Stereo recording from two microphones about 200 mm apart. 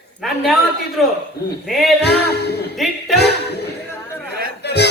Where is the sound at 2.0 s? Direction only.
55° left (ahead or behind).